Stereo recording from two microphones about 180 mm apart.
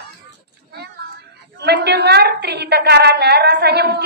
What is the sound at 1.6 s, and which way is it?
A woman's voice, 65° right (ahead or behind).